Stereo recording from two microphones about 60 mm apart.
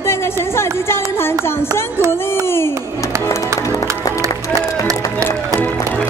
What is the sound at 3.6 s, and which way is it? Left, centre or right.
Music, left.